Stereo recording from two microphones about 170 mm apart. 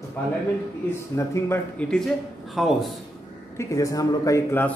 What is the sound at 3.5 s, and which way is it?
Speech, 20° left (ahead or behind).